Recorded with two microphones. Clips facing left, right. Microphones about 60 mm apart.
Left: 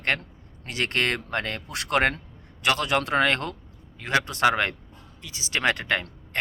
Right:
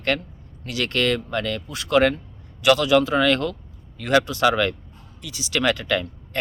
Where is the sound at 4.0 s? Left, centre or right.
Left.